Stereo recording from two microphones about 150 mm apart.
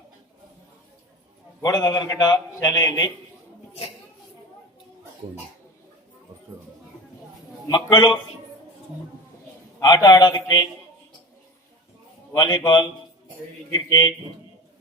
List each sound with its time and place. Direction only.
1.6 s a man's voice: 25° left (ahead or behind)
7.7 s a man's voice: 30° left (ahead or behind)
9.8 s a man's voice: 25° left (ahead or behind)
12.3 s a man's voice: 30° left (ahead or behind)